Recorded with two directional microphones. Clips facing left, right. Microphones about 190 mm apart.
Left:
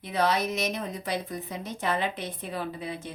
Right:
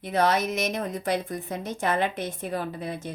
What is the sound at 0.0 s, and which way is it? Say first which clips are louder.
A woman's voice: right 3 dB; 50° right (ahead or behind).